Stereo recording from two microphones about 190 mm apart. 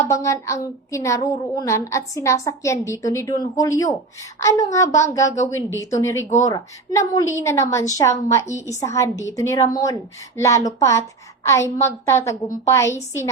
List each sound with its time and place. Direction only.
0.1 s a woman's voice: 15° left (ahead or behind)